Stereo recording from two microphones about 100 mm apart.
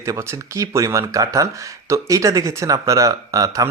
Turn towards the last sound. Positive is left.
turn(degrees=-35)  # may be behind; listen again after turning